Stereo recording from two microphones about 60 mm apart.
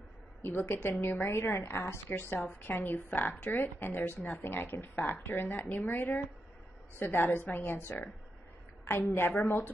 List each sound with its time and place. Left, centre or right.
0.4 s a woman's voice: left
1.2 s a woman's voice: left
9.0 s a woman's voice: left
9.3 s speech: left